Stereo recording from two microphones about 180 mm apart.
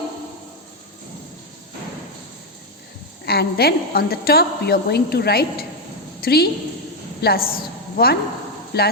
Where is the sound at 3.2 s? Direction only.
60° left (ahead or behind).